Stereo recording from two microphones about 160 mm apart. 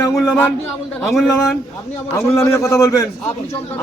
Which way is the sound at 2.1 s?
20° left (ahead or behind).